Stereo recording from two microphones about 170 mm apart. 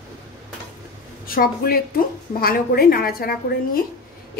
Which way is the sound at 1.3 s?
60° left (ahead or behind).